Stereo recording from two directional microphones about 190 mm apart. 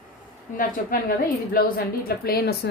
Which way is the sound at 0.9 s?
50° left (ahead or behind).